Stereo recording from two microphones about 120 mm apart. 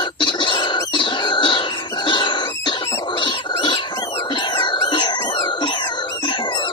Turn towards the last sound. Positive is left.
turn(degrees=40)  # may be behind; listen again after turning